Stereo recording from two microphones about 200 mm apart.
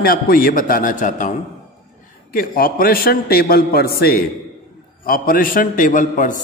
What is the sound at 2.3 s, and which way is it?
A man's voice, 45° left (ahead or behind).